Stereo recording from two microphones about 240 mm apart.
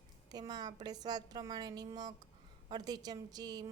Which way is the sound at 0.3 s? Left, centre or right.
Centre.